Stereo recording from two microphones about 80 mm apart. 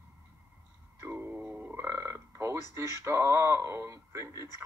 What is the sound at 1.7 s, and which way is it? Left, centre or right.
Burping, right.